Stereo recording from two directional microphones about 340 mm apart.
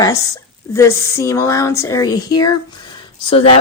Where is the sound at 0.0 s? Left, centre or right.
Centre.